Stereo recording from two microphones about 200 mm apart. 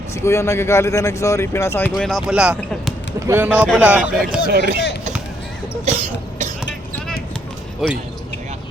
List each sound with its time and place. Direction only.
0.1 s speech: 15° left (ahead or behind); by 4.4 s 5° right (ahead or behind)
4.4 s speech: 55° right (ahead or behind)
5.8 s cough: 35° right (ahead or behind)
7.8 s speech: centre (ahead or behind)